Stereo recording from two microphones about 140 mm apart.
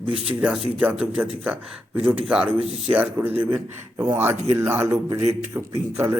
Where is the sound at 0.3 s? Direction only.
10° right (ahead or behind).